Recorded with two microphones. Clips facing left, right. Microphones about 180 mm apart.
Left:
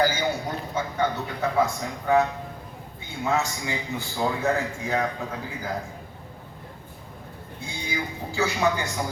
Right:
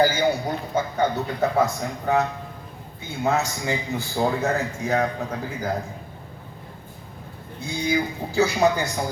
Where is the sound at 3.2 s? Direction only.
40° right (ahead or behind).